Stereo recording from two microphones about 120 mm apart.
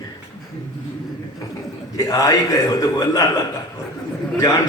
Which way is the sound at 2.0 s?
30° left (ahead or behind).